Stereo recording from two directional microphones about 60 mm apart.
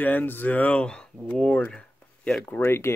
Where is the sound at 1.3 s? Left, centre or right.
Left.